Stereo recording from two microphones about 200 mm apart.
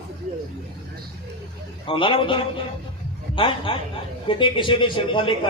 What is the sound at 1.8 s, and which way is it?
A man's voice, 25° left (ahead or behind).